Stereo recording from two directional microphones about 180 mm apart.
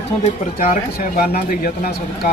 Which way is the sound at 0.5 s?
50° left (ahead or behind).